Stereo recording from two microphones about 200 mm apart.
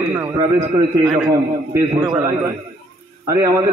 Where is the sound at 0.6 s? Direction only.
25° right (ahead or behind).